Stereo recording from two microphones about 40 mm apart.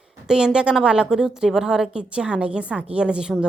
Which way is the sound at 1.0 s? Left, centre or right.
Centre.